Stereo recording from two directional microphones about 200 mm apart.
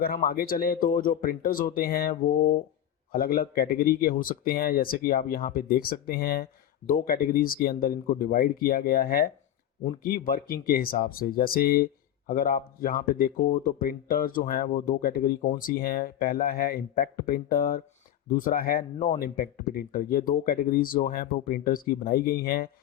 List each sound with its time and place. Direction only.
0.0 s speech: 50° left (ahead or behind)